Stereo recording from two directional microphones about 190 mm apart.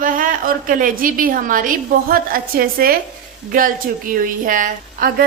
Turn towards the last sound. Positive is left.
turn(degrees=-45)  # may be behind; listen again after turning